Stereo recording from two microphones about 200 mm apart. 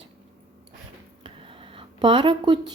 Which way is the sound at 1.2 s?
25° right (ahead or behind).